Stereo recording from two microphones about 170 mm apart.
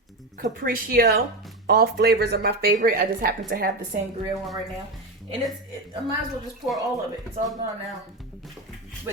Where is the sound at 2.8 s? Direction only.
55° right (ahead or behind).